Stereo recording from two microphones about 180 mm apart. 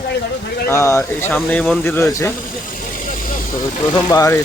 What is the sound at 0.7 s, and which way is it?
Speech, 15° left (ahead or behind).